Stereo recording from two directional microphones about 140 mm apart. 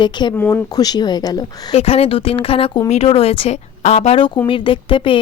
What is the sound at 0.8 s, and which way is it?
Speech, 30° left (ahead or behind).